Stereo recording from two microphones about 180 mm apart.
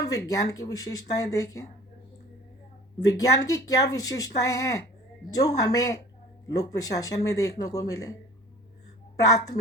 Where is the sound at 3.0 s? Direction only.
20° left (ahead or behind).